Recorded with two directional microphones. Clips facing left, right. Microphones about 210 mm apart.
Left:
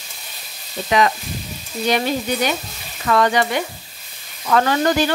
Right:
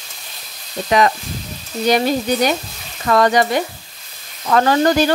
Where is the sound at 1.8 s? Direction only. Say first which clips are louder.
Right 4 dB; 40° right (ahead or behind).